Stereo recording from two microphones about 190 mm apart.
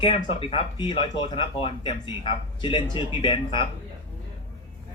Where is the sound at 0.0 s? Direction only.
30° left (ahead or behind).